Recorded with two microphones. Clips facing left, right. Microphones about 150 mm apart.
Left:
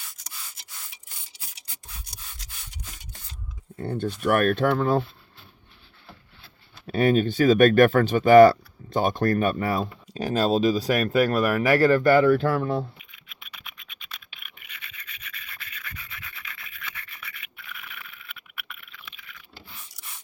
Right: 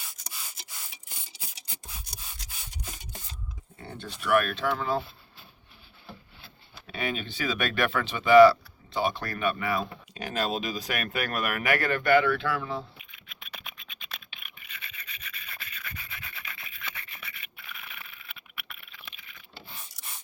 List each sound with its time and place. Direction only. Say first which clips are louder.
3.8 s speech: left 13 dB; 50° left (ahead or behind)
6.9 s speech: left 13 dB; 45° left (ahead or behind)
18.0 s frog: left 3 dB; 30° right (ahead or behind)